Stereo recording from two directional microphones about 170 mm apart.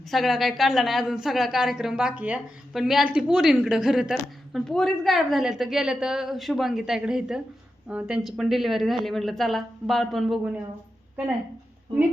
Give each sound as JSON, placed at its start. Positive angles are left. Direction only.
{"t": 0.1, "sound": "a woman's voice", "side_deg": 0}